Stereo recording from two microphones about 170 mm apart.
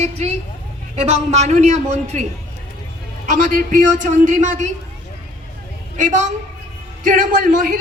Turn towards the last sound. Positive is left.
turn(degrees=-50)  # may be behind; listen again after turning